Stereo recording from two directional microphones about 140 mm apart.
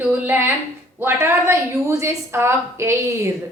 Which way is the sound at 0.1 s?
15° right (ahead or behind).